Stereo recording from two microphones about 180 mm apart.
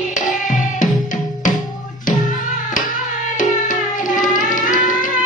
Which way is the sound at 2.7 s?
45° left (ahead or behind).